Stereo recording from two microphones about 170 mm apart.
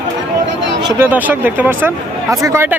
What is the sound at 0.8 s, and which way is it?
Speech, 20° right (ahead or behind).